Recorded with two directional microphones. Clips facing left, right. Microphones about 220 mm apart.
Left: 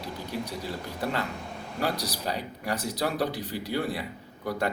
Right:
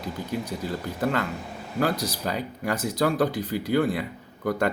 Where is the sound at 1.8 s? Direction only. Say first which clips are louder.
Right 5 dB; 50° right (ahead or behind).